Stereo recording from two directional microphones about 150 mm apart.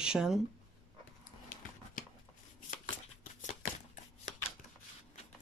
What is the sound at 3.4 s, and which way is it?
Shuffling cards, 55° left (ahead or behind).